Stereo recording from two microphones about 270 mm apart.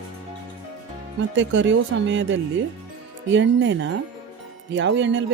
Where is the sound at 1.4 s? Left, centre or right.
Right.